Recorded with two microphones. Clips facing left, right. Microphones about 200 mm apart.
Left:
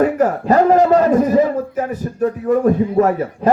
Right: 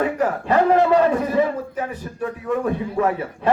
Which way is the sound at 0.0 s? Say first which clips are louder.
Left 6 dB; 40° left (ahead or behind).